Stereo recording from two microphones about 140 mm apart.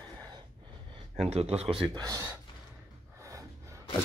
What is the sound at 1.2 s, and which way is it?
Speech, 45° right (ahead or behind).